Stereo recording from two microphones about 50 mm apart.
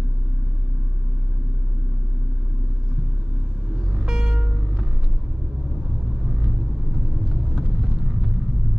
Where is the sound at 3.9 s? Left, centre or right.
Centre.